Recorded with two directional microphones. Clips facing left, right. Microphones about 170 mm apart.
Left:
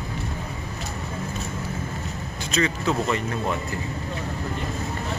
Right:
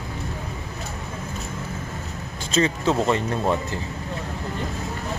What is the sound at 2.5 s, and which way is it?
Speech, 30° right (ahead or behind).